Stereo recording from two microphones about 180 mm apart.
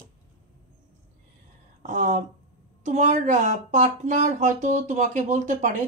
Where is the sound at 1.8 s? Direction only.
45° right (ahead or behind).